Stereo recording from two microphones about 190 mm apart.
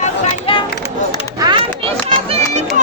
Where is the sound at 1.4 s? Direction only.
25° right (ahead or behind).